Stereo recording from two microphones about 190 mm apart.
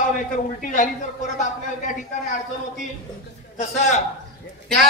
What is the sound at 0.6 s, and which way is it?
Speech, 40° left (ahead or behind).